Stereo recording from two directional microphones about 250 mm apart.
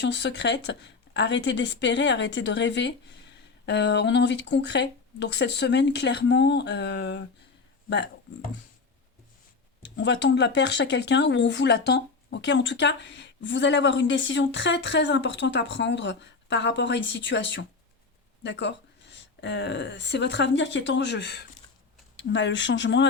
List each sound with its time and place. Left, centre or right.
0.0 s speech: left
10.0 s speech: left